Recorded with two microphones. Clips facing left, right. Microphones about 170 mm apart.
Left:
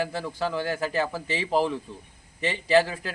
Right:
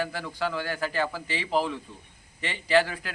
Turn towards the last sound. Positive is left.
turn(degrees=25)  # may be behind; listen again after turning